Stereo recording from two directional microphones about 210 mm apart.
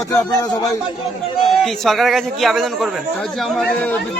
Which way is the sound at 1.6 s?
Centre (ahead or behind).